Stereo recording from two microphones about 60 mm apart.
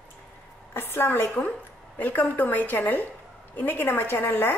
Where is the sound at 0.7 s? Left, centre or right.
Left.